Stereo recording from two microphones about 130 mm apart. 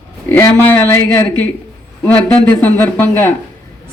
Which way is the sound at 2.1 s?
10° left (ahead or behind).